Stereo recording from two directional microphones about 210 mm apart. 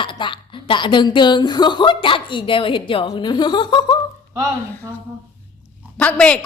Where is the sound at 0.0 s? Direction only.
25° left (ahead or behind).